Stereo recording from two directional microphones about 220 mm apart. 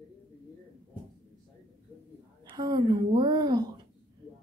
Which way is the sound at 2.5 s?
20° right (ahead or behind).